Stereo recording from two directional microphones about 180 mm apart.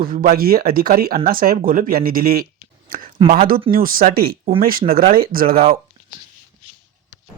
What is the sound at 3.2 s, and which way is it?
Speech, 35° right (ahead or behind).